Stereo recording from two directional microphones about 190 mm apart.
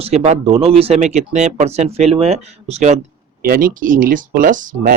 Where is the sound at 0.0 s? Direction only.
35° right (ahead or behind).